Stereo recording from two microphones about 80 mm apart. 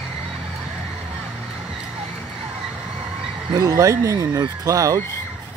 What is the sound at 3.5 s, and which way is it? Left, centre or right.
Speech, right.